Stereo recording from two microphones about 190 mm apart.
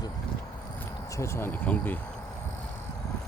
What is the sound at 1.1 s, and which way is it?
Speech, 15° left (ahead or behind).